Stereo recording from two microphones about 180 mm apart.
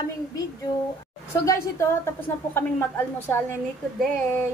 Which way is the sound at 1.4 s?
15° left (ahead or behind).